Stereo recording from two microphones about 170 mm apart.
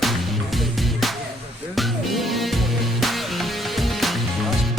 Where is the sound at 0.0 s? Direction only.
Centre (ahead or behind).